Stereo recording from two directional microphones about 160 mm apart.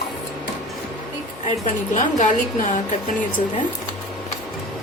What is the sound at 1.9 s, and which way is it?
Speech, 50° left (ahead or behind).